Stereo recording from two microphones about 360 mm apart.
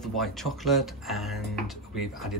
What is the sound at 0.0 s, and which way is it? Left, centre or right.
Speech, centre.